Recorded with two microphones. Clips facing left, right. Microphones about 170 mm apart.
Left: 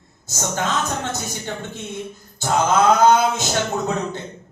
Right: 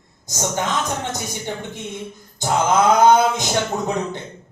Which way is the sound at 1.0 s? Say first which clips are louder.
Even; 15° right (ahead or behind).